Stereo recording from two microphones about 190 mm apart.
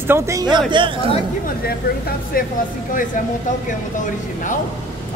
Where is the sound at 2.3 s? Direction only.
50° left (ahead or behind).